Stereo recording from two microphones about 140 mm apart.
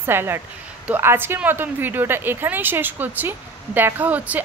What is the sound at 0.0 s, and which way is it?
Speech, 15° right (ahead or behind).